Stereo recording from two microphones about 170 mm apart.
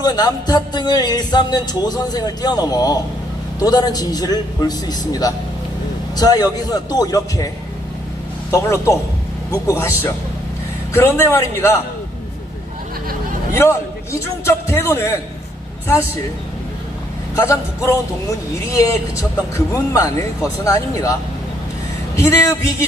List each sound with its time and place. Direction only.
0.0 s music: 25° left (ahead or behind)
8.4 s a man's voice: 20° left (ahead or behind)
13.5 s a man's voice: 15° left (ahead or behind)
17.3 s a man's voice: 15° left (ahead or behind)
19.5 s music: 15° left (ahead or behind)
22.1 s a man's voice: 15° left (ahead or behind)